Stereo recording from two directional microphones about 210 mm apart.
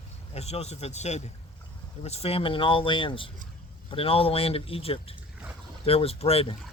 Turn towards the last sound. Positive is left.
turn(degrees=30)  # may be behind; listen again after turning